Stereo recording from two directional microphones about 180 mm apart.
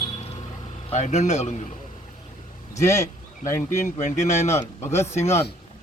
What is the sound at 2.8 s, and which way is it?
A man's voice, 40° left (ahead or behind).